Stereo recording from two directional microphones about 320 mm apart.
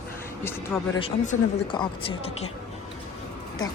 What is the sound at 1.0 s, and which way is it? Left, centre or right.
Speech, centre.